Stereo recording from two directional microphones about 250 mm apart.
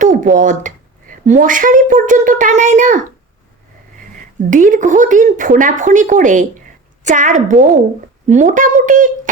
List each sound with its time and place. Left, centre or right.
0.0 s a sound: right
2.0 s speech: right
4.4 s speech: right